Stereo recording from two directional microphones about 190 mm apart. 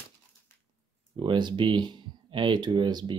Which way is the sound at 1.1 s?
25° right (ahead or behind).